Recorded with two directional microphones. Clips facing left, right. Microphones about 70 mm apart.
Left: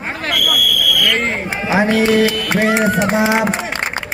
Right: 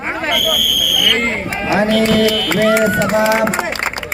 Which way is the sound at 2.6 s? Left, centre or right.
Centre.